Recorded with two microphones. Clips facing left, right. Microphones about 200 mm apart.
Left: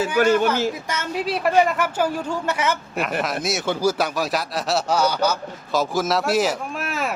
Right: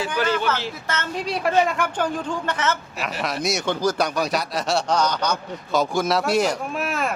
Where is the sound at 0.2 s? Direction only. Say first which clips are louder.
Left 7 dB; 45° left (ahead or behind).